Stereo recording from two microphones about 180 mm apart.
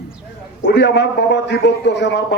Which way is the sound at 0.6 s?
70° left (ahead or behind).